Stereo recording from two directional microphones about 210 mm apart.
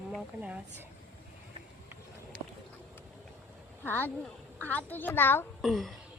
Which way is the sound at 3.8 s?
10° left (ahead or behind).